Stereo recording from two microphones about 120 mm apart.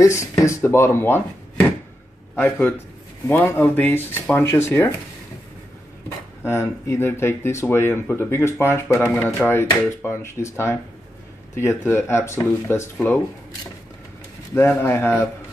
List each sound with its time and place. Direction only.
0.0 s speech: 25° left (ahead or behind)
2.3 s speech: 20° left (ahead or behind)
6.0 s speech: 20° left (ahead or behind)
11.9 s speech: 20° left (ahead or behind)
14.5 s speech: 20° left (ahead or behind)